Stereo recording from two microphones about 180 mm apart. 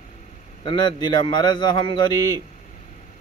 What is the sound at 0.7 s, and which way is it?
Speech, 25° left (ahead or behind).